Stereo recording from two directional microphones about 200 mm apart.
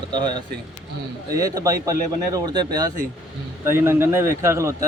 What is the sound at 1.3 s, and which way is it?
A man's voice, 15° right (ahead or behind).